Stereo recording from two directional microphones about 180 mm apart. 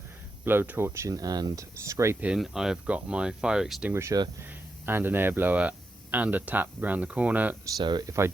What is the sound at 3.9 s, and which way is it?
Speech, 20° right (ahead or behind).